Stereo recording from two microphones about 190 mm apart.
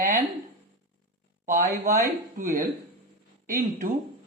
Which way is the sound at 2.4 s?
45° right (ahead or behind).